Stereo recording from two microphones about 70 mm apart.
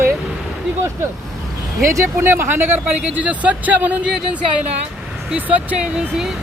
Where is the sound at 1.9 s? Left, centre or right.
Right.